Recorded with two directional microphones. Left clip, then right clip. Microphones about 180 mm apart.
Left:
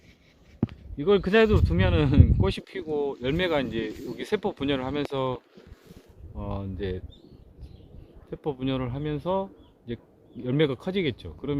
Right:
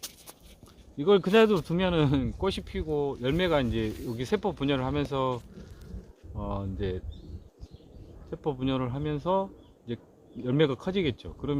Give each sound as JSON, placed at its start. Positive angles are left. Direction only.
{"t": 0.9, "sound": "speech", "side_deg": 20}
{"t": 8.3, "sound": "speech", "side_deg": 30}